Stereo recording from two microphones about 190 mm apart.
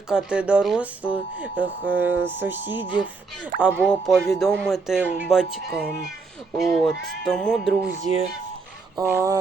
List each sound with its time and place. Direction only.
0.1 s speech: 5° right (ahead or behind)
1.1 s music: 5° right (ahead or behind)
3.8 s speech: centre (ahead or behind)
9.0 s music: 15° right (ahead or behind)